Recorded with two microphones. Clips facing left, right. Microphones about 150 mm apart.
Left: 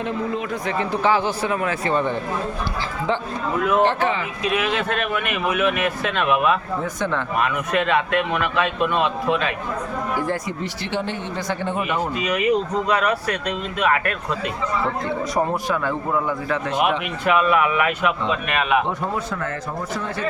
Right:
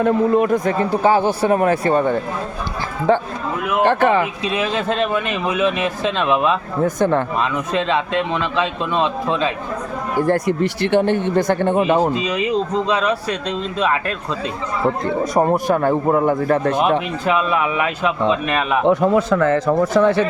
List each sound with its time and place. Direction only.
0.0 s speech: 50° right (ahead or behind)
1.5 s speech: 45° right (ahead or behind)
4.4 s speech: 30° right (ahead or behind)
6.8 s speech: 50° right (ahead or behind)
7.3 s speech: 25° right (ahead or behind)
10.2 s speech: 60° right (ahead or behind)
11.8 s speech: 30° right (ahead or behind)
15.4 s speech: 50° right (ahead or behind)
17.2 s a man's voice: 30° right (ahead or behind)
18.9 s speech: 90° right